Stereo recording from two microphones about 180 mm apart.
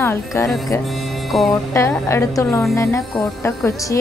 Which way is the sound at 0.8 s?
Centre (ahead or behind).